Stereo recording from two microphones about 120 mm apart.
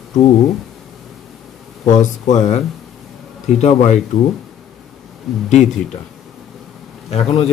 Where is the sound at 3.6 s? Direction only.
70° left (ahead or behind).